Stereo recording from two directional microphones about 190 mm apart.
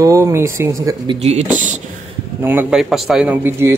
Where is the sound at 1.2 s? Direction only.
35° right (ahead or behind).